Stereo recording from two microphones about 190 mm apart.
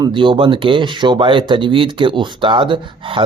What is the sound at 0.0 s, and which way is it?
Speech, 25° right (ahead or behind).